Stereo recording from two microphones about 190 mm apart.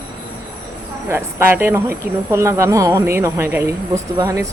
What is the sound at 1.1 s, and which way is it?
Speech, 10° right (ahead or behind).